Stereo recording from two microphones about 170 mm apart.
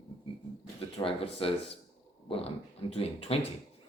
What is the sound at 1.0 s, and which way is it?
Speech, 35° left (ahead or behind).